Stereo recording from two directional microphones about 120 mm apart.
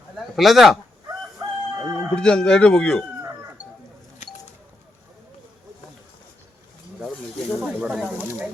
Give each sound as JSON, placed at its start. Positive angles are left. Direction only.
{"t": 0.2, "sound": "speech", "side_deg": 0}
{"t": 1.0, "sound": "crowing", "side_deg": -25}
{"t": 2.1, "sound": "speech", "side_deg": 5}
{"t": 7.6, "sound": "speech", "side_deg": -10}